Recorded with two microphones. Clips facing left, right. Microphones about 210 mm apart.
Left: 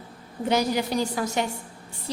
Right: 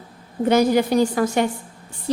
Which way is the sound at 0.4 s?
55° right (ahead or behind).